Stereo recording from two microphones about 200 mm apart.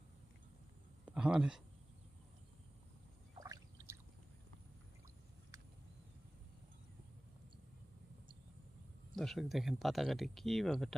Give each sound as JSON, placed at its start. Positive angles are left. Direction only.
{"t": 1.0, "sound": "a sound", "side_deg": -5}
{"t": 3.3, "sound": "drip", "side_deg": -20}
{"t": 9.1, "sound": "speech", "side_deg": 0}